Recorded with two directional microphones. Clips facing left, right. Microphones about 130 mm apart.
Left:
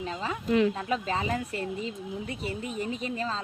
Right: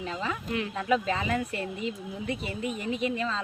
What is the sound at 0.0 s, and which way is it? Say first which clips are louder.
Speech: even; 35° left (ahead or behind).